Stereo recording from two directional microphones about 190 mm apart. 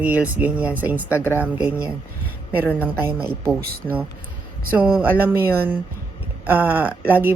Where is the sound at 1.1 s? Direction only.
10° left (ahead or behind).